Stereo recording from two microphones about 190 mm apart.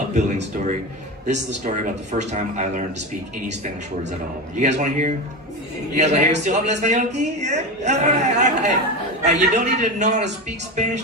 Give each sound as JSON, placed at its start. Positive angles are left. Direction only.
{"t": 0.1, "sound": "a man's voice", "side_deg": -40}
{"t": 4.5, "sound": "a man's voice", "side_deg": -40}